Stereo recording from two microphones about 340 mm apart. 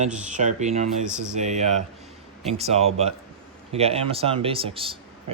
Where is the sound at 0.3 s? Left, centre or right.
Right.